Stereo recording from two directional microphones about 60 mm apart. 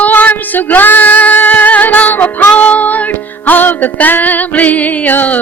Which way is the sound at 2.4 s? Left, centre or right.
Left.